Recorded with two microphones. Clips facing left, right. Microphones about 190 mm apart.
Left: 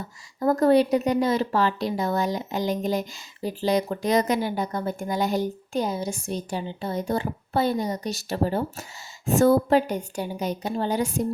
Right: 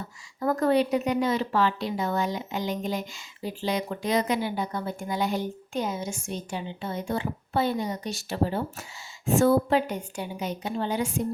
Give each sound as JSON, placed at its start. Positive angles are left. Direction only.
{"t": 0.3, "sound": "a woman's voice", "side_deg": 35}